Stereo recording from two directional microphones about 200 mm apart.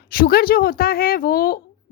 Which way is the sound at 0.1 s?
50° left (ahead or behind).